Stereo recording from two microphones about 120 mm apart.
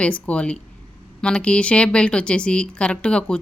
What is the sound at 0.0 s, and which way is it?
Speech, 10° left (ahead or behind).